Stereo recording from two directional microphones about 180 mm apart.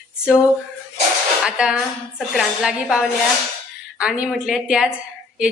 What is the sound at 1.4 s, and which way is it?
A woman's voice, 5° right (ahead or behind).